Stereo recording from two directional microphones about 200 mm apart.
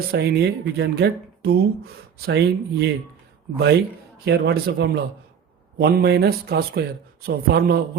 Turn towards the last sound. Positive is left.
turn(degrees=-50)  # may be behind; listen again after turning